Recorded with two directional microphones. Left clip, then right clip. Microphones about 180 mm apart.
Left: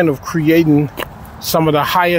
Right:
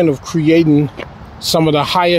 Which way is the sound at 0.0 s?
15° right (ahead or behind).